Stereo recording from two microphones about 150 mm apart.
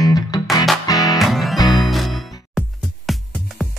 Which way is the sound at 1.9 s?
Centre (ahead or behind).